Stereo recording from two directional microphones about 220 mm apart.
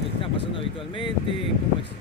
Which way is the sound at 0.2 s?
25° left (ahead or behind).